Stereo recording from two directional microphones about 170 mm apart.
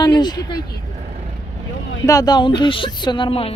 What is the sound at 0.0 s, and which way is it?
Speech, 25° left (ahead or behind).